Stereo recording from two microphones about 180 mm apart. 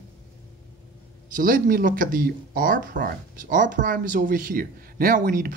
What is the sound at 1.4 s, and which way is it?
Speech, 50° right (ahead or behind).